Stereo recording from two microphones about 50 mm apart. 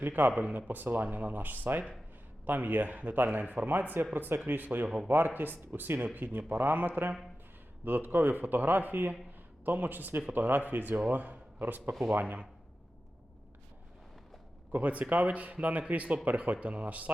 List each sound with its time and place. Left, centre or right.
0.3 s speech: right
14.7 s speech: right